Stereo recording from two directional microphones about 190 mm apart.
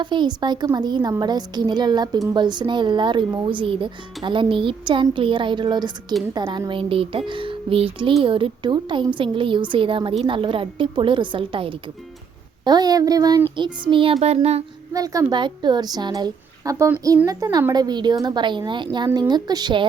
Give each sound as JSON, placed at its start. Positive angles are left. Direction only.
{"t": 0.0, "sound": "a woman's voice", "side_deg": -25}
{"t": 13.8, "sound": "music", "side_deg": -25}
{"t": 14.9, "sound": "a woman's voice", "side_deg": -20}